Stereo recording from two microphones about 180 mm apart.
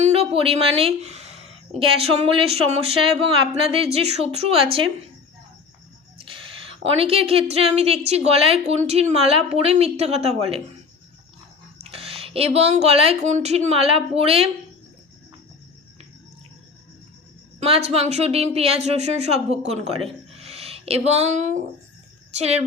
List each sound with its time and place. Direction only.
0.0 s a woman's voice: 35° right (ahead or behind)
6.1 s a sound: 30° right (ahead or behind)
7.5 s a woman's voice: 35° right (ahead or behind)
11.8 s speech: 35° right (ahead or behind)
17.6 s a woman's voice: 35° right (ahead or behind)